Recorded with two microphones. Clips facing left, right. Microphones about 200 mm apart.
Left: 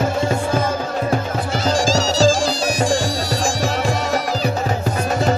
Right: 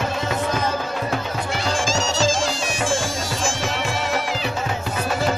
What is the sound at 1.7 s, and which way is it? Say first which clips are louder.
Bagpipes: left 6 dB; 35° left (ahead or behind).